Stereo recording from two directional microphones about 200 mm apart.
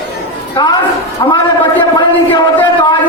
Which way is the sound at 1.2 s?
20° left (ahead or behind).